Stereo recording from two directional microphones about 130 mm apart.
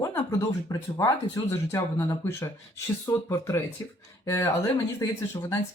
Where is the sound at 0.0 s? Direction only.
25° left (ahead or behind).